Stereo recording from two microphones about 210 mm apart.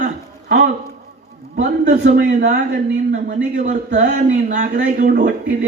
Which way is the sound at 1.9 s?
40° right (ahead or behind).